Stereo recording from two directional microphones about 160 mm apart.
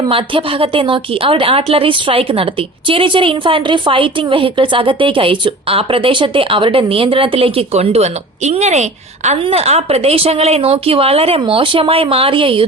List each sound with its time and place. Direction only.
0.0 s a woman's voice: 35° right (ahead or behind)